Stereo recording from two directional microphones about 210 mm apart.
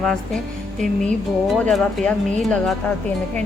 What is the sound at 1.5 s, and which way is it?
A woman's voice, centre (ahead or behind).